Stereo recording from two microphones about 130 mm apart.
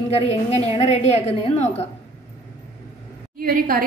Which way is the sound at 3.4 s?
90° right.